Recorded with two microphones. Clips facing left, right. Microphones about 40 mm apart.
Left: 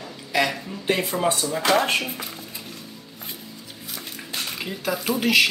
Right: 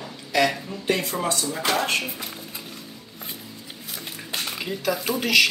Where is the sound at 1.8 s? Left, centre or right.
Left.